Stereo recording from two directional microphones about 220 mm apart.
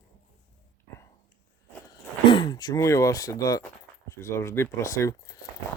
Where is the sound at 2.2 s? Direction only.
20° left (ahead or behind).